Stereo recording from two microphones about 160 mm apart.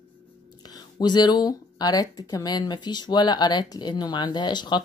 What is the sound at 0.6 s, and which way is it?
Speech, 25° left (ahead or behind).